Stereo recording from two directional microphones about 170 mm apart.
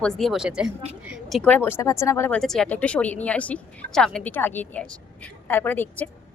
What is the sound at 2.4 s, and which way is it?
A woman's voice, 5° left (ahead or behind).